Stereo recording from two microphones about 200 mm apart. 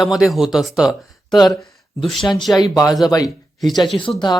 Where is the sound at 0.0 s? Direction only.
Centre (ahead or behind).